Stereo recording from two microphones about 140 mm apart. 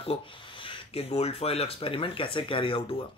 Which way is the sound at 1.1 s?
50° left (ahead or behind).